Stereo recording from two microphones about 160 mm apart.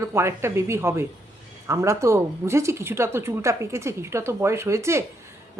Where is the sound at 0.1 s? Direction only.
15° right (ahead or behind).